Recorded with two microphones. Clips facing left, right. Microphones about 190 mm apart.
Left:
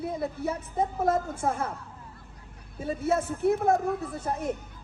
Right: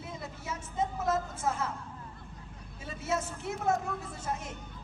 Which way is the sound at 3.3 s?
60° left (ahead or behind).